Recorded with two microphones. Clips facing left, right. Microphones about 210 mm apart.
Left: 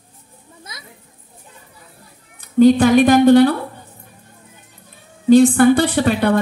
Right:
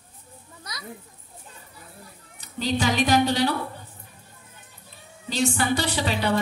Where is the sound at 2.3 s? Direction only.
55° left (ahead or behind).